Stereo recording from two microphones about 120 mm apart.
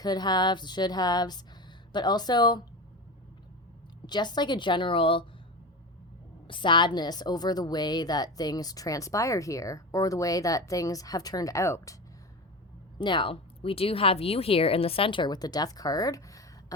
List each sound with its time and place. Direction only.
0.0 s speech: 35° left (ahead or behind)
4.0 s speech: 35° left (ahead or behind)
6.5 s a woman's voice: 40° left (ahead or behind); by 11.9 s 25° left (ahead or behind)
13.0 s speech: 40° left (ahead or behind)